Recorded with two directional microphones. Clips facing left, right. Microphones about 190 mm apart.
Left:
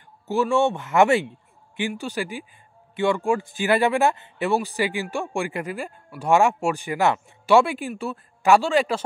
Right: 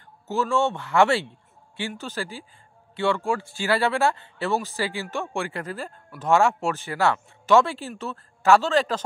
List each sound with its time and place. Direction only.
0.3 s speech: 15° left (ahead or behind)